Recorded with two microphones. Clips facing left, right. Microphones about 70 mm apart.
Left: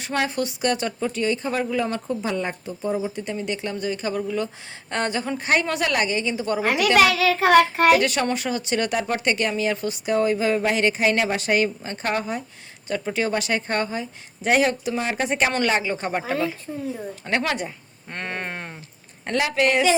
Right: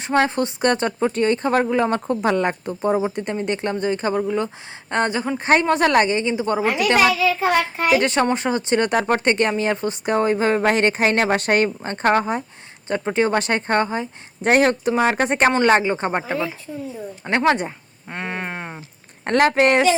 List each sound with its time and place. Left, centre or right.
0.0 s speech: right
2.2 s speech: right
6.6 s child singing: left
7.9 s speech: right
14.4 s speech: right
15.6 s speech: right
18.1 s a sound: centre
19.2 s speech: right